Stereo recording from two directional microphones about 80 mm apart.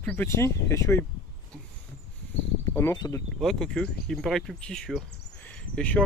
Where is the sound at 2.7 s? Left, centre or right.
Left.